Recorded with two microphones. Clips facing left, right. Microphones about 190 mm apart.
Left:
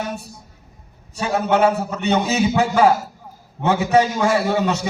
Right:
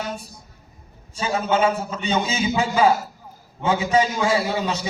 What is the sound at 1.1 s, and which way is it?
A man's voice, 65° left (ahead or behind).